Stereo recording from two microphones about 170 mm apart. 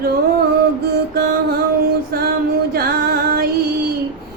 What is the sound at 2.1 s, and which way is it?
A woman's voice, 65° right (ahead or behind).